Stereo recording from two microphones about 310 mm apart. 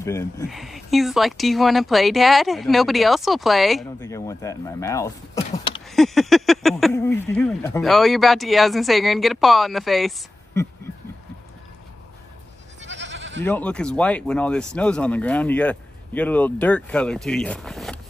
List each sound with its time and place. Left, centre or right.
0.0 s speech: centre
0.5 s speech: centre
12.8 s goat: right
13.4 s speech: centre